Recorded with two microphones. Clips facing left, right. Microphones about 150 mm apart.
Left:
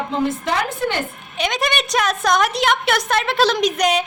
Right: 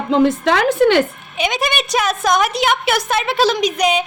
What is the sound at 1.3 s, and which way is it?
A woman's voice, 5° right (ahead or behind).